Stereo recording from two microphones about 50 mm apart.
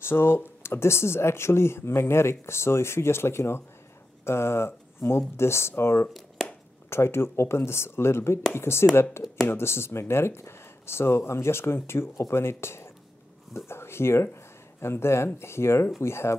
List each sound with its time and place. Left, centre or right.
0.0 s speech: left